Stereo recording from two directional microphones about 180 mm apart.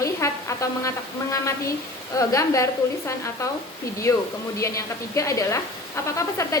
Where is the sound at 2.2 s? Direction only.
20° left (ahead or behind).